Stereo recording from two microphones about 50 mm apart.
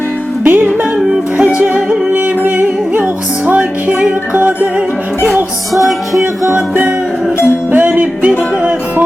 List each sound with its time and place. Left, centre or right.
0.4 s music: right
0.9 s music: centre
2.4 s music: right
3.0 s music: right
5.7 s music: centre
6.5 s music: right
7.3 s music: left
7.7 s music: right